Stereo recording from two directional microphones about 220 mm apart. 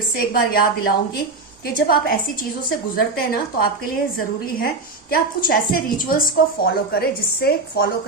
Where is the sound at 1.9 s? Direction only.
45° left (ahead or behind).